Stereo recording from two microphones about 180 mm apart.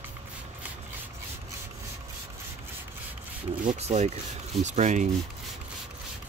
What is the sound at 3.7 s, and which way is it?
Speech, 35° right (ahead or behind).